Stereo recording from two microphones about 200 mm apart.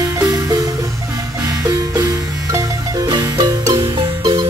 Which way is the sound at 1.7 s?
15° right (ahead or behind).